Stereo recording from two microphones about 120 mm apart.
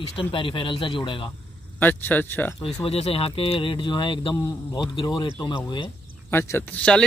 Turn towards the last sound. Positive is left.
turn(degrees=10)  # may be behind; listen again after turning